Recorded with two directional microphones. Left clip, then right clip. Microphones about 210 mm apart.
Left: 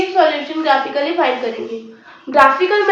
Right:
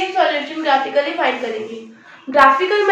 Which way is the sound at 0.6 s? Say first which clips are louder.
Left 1 dB; 5° left (ahead or behind).